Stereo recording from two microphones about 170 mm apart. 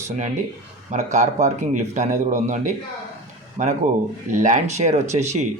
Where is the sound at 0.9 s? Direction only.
45° right (ahead or behind).